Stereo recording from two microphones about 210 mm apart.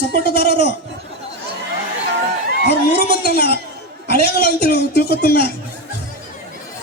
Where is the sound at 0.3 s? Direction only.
50° left (ahead or behind).